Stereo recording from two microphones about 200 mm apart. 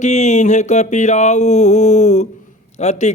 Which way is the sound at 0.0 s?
35° left (ahead or behind).